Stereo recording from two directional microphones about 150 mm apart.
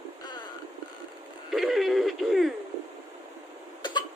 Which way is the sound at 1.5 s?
Centre (ahead or behind).